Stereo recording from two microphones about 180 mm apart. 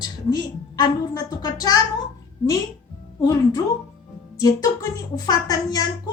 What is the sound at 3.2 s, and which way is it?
A woman's voice, 20° left (ahead or behind).